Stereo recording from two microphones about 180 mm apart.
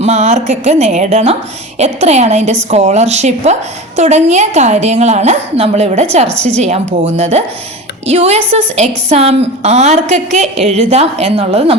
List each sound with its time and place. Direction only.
0.0 s a woman's voice: 40° right (ahead or behind)